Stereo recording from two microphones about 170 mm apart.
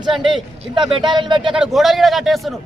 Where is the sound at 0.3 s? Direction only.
30° right (ahead or behind).